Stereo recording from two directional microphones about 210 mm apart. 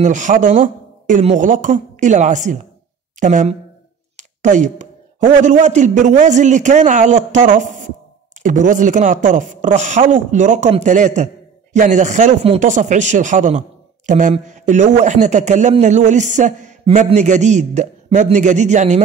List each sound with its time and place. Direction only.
0.0 s speech: 35° right (ahead or behind)